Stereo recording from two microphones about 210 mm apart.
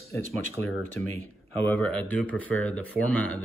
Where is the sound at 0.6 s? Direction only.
10° left (ahead or behind).